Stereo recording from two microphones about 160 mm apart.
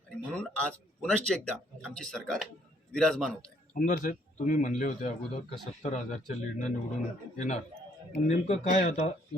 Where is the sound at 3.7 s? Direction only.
55° left (ahead or behind).